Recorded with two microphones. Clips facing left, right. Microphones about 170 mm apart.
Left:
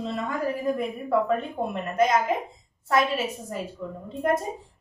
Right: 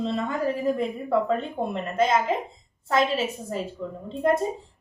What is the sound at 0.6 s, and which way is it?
A woman's voice, 25° right (ahead or behind).